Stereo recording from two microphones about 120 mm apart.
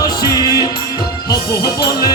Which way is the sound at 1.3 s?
35° left (ahead or behind).